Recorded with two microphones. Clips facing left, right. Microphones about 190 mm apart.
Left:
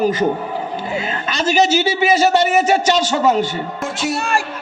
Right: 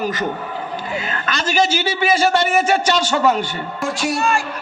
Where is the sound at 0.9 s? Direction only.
20° left (ahead or behind).